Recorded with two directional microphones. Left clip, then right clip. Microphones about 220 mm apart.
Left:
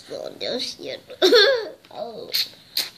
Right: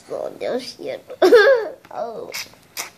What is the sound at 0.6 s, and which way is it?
Speech, centre (ahead or behind).